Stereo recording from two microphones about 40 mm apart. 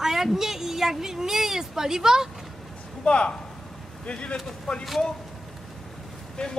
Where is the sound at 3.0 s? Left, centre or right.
Left.